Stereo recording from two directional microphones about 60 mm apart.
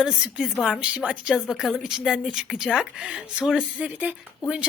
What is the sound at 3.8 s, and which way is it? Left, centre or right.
Speech, right.